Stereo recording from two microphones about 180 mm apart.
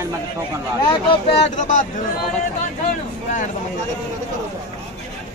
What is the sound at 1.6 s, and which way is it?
Speech, 45° left (ahead or behind).